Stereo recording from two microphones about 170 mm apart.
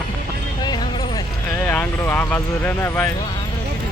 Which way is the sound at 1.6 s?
10° left (ahead or behind).